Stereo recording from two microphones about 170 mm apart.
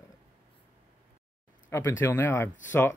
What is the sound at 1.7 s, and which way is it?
Speech, 15° left (ahead or behind).